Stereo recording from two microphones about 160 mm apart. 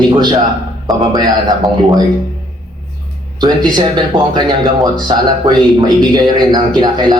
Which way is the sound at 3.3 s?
25° right (ahead or behind).